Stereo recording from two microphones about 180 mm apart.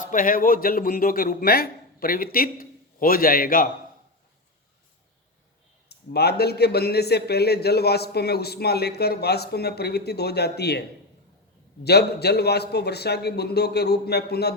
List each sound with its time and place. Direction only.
0.0 s a man's voice: 45° left (ahead or behind)
5.9 s a man's voice: 65° left (ahead or behind)